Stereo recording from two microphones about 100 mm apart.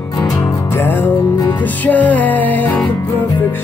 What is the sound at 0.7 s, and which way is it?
Music, 20° left (ahead or behind).